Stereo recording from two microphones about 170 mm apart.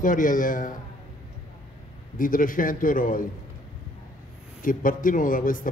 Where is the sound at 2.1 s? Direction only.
55° left (ahead or behind).